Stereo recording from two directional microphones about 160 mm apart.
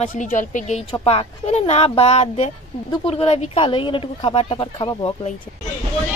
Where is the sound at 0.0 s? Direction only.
50° left (ahead or behind).